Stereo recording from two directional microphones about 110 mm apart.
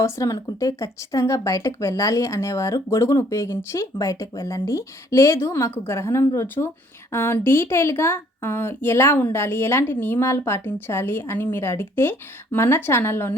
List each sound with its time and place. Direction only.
0.0 s a woman's voice: 25° left (ahead or behind)